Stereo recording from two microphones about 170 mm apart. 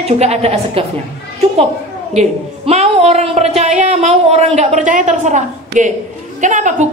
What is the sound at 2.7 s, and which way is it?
A woman's voice, 40° right (ahead or behind).